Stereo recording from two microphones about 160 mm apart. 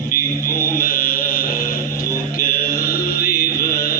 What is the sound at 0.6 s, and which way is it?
Chant, 60° left (ahead or behind).